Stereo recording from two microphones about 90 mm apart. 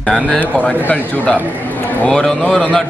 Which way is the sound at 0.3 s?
15° left (ahead or behind).